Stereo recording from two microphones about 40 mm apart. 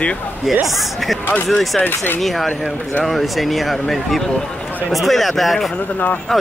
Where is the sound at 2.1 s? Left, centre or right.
Centre.